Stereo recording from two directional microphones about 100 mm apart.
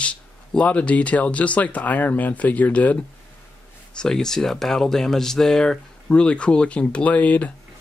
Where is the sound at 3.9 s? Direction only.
5° left (ahead or behind).